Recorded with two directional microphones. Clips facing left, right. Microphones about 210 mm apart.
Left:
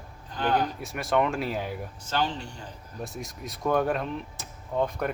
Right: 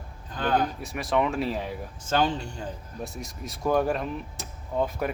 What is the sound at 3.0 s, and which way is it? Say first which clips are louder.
Speech: left 1 dB; centre (ahead or behind).